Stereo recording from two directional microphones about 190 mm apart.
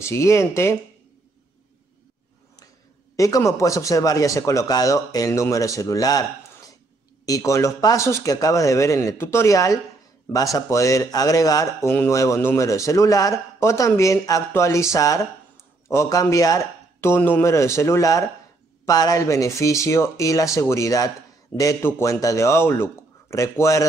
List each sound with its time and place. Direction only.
0.0 s speech: 15° left (ahead or behind)
3.2 s speech: 15° left (ahead or behind)
7.2 s speech: 15° left (ahead or behind)